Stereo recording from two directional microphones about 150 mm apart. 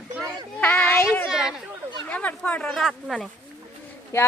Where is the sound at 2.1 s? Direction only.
10° left (ahead or behind).